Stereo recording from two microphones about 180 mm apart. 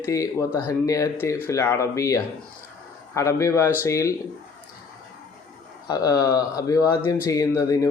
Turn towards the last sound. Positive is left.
turn(degrees=15)  # may be behind; listen again after turning